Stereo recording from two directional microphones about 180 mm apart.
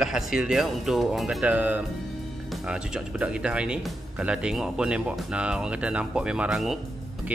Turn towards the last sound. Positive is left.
turn(degrees=0)  # may be behind; listen again after turning